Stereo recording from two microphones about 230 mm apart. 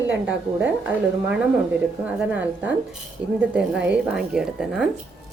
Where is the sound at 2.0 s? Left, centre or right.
Centre.